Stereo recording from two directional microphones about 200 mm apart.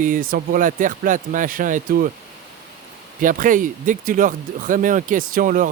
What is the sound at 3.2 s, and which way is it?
Speech, 40° right (ahead or behind).